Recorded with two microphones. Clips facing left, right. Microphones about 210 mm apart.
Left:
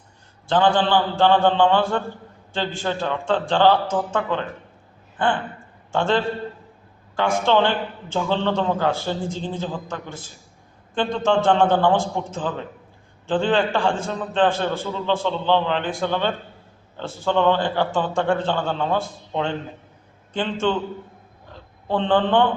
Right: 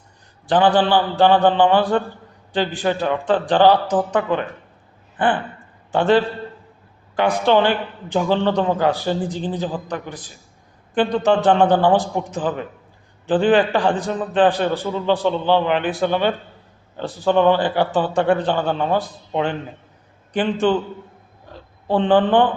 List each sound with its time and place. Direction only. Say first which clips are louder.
0.4 s a man's voice: right 3 dB; 15° right (ahead or behind)
5.9 s a man's voice: right 5 dB; 15° right (ahead or behind)
7.2 s a man's voice: right 3 dB; 15° right (ahead or behind)
21.8 s a man's voice: right 4 dB; 15° right (ahead or behind)